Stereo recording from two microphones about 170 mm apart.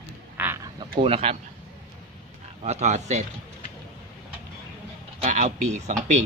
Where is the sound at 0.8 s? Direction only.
35° right (ahead or behind).